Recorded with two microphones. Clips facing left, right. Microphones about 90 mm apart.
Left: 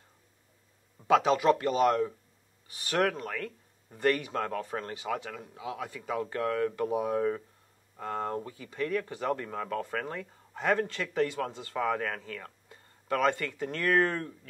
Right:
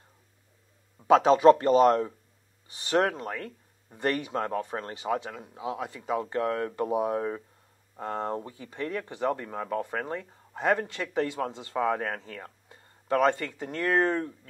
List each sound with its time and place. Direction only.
1.0 s speech: 25° right (ahead or behind)